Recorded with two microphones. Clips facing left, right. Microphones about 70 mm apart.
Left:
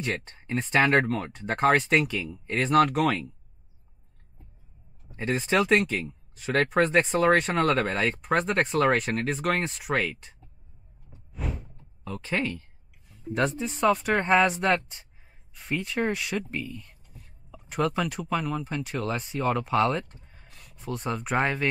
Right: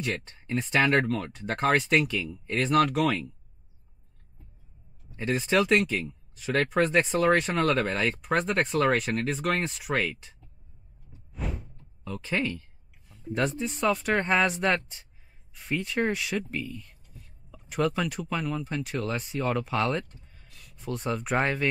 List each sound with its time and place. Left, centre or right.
0.5 s speech: centre
5.5 s speech: centre
11.3 s a sound: centre
12.0 s speech: centre
20.1 s a sound: left
20.7 s speech: centre